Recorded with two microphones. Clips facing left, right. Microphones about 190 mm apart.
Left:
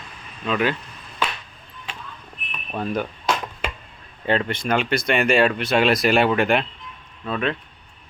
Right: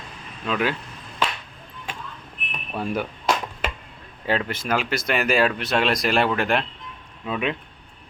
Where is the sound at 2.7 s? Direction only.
10° right (ahead or behind).